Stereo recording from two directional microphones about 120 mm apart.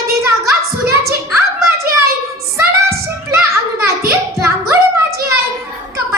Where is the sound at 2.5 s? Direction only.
25° right (ahead or behind).